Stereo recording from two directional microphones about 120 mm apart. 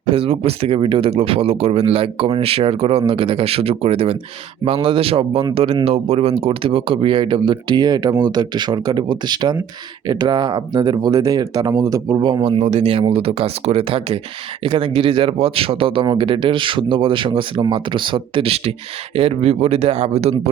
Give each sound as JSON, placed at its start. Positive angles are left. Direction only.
{"t": 0.1, "sound": "speech", "side_deg": -55}
{"t": 12.4, "sound": "speech", "side_deg": -55}